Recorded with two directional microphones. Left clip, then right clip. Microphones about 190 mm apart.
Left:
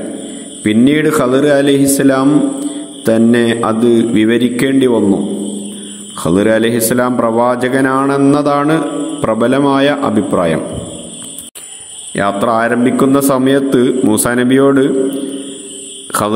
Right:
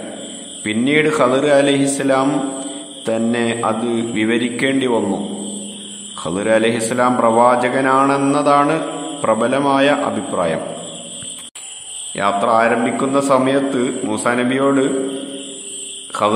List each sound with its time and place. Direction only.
0.7 s a man's voice: 15° left (ahead or behind)
12.2 s a man's voice: 25° left (ahead or behind)